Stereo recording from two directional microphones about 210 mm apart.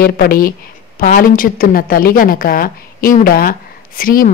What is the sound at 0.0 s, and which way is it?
A woman's voice, 45° left (ahead or behind).